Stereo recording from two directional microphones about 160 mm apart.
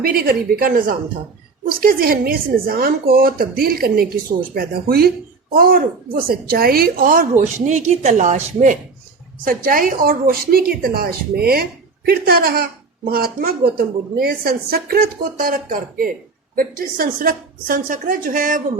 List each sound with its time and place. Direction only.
0.0 s speech: 65° right (ahead or behind)
7.3 s speech: 45° right (ahead or behind)
9.4 s a woman's voice: 60° right (ahead or behind)